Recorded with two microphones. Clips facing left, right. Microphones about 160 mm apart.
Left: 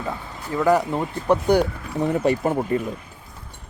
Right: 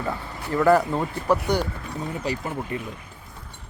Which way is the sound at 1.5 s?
60° left (ahead or behind).